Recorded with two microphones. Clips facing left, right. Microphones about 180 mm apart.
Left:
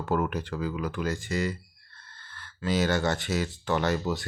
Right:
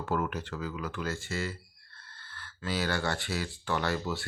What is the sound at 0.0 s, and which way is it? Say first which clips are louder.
Speech: left 4 dB; 15° left (ahead or behind).